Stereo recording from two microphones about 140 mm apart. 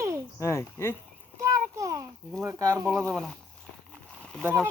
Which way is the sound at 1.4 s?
20° right (ahead or behind).